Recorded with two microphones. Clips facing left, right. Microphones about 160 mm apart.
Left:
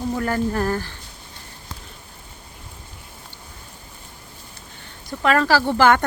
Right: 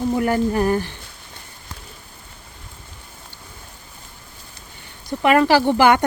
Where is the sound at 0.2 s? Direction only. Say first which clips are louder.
Right 3 dB; 15° right (ahead or behind).